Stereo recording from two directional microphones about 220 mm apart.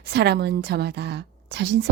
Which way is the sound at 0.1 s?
50° right (ahead or behind).